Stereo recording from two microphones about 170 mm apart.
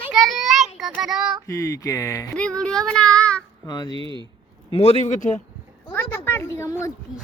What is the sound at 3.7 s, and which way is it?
Speech, 25° left (ahead or behind).